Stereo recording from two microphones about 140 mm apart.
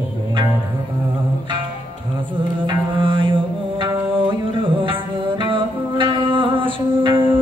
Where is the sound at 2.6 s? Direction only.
35° right (ahead or behind).